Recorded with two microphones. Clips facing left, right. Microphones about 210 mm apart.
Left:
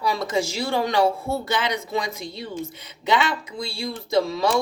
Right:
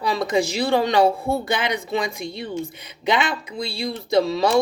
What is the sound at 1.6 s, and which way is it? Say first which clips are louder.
Speech: right 2 dB; 55° right (ahead or behind).